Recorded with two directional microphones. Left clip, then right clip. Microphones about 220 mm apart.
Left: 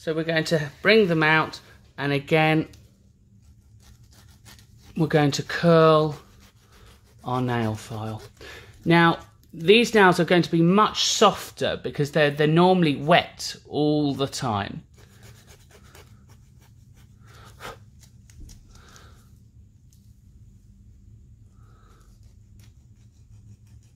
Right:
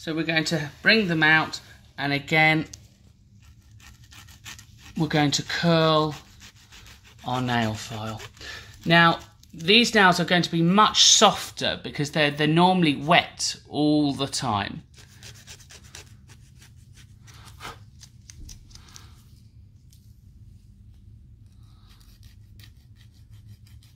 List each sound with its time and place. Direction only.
0.0 s speech: 40° left (ahead or behind)
4.9 s speech: 35° left (ahead or behind)
7.2 s speech: 30° left (ahead or behind)
15.5 s rub: 10° left (ahead or behind)
17.4 s a sound: 30° left (ahead or behind)